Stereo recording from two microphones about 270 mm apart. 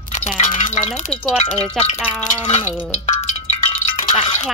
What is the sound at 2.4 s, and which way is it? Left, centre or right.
Music, left.